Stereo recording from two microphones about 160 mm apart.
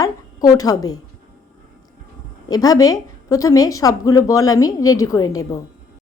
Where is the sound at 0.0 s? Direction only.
20° left (ahead or behind).